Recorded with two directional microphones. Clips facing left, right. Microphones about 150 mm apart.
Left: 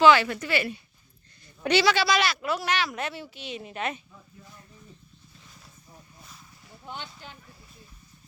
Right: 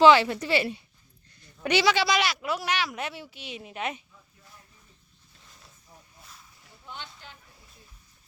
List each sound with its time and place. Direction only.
0.0 s a woman's voice: 25° right (ahead or behind)
1.6 s speech: 15° right (ahead or behind)